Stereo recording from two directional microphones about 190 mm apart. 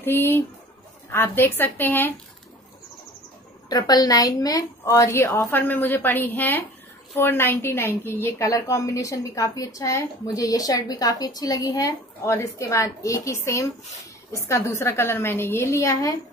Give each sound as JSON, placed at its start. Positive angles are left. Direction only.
{"t": 0.0, "sound": "a woman's voice", "side_deg": 10}
{"t": 3.6, "sound": "a woman's voice", "side_deg": 20}